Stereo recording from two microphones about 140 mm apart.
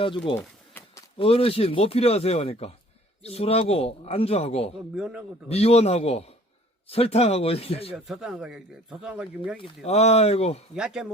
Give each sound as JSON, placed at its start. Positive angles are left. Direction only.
{"t": 0.3, "sound": "pigeon", "side_deg": 15}
{"t": 1.2, "sound": "speech", "side_deg": 40}
{"t": 4.9, "sound": "speech", "side_deg": -5}
{"t": 5.5, "sound": "speech", "side_deg": 45}
{"t": 7.9, "sound": "speech", "side_deg": -5}
{"t": 9.6, "sound": "speech", "side_deg": 45}
{"t": 10.8, "sound": "speech", "side_deg": -5}